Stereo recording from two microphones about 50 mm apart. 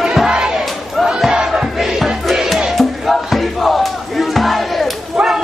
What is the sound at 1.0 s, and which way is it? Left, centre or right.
Crowd, centre.